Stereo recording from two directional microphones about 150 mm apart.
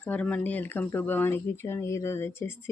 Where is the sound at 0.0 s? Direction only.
10° left (ahead or behind).